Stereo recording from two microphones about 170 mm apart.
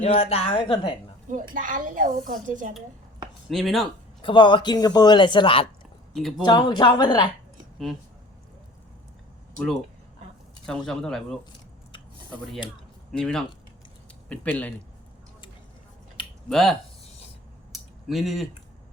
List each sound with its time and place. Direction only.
0.0 s a woman's voice: 35° left (ahead or behind)
1.3 s a woman's voice: 50° right (ahead or behind)
3.5 s speech: centre (ahead or behind)
4.2 s speech: 30° left (ahead or behind)
6.1 s speech: centre (ahead or behind)
6.4 s speech: 25° left (ahead or behind)
10.7 s speech: 5° left (ahead or behind)
13.1 s speech: 5° left (ahead or behind)
16.5 s speech: centre (ahead or behind)
17.7 s a sound: centre (ahead or behind)